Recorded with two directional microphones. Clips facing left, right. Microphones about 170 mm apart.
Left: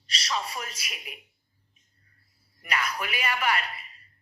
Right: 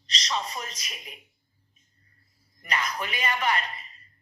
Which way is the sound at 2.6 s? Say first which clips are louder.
Even; 10° left (ahead or behind).